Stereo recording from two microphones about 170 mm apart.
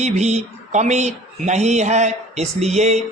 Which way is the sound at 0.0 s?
40° right (ahead or behind).